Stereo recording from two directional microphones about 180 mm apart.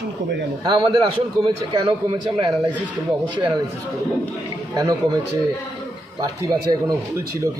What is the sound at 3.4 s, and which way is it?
Speech, 25° right (ahead or behind).